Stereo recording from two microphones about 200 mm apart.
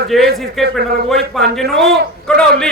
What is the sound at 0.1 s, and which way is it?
A man's voice, centre (ahead or behind).